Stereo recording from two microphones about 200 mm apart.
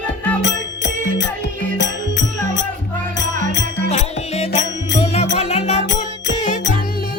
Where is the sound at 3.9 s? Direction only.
30° left (ahead or behind).